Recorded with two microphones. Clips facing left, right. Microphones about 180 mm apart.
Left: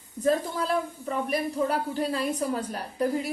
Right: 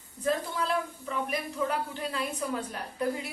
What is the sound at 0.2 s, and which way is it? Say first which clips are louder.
A woman's voice: left 4 dB; 40° left (ahead or behind).